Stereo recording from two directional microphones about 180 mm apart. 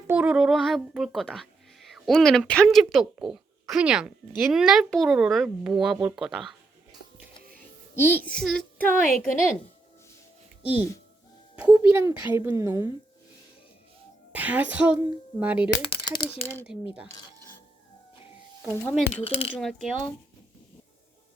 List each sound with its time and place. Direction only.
0.1 s speech: 5° right (ahead or behind)
7.5 s music: 10° left (ahead or behind)
8.4 s speech: 5° left (ahead or behind)
9.0 s a woman's voice: 50° left (ahead or behind)
11.5 s speech: 10° right (ahead or behind)
14.3 s speech: 10° right (ahead or behind)
15.8 s speech: 25° left (ahead or behind)
16.7 s speech: 5° right (ahead or behind)
18.6 s speech: centre (ahead or behind)
19.2 s speech: 30° left (ahead or behind)
19.5 s speech: centre (ahead or behind)